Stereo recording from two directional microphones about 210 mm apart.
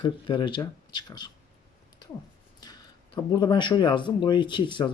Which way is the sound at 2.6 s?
20° left (ahead or behind).